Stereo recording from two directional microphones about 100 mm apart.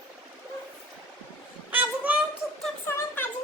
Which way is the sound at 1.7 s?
15° right (ahead or behind).